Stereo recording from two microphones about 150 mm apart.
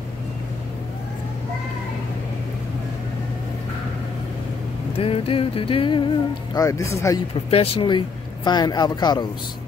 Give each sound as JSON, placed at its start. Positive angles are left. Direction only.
{"t": 4.9, "sound": "music", "side_deg": 40}
{"t": 6.5, "sound": "speech", "side_deg": 20}
{"t": 7.5, "sound": "music", "side_deg": 40}
{"t": 8.5, "sound": "speech", "side_deg": 25}